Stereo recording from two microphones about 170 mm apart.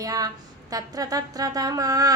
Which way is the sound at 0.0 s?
20° right (ahead or behind).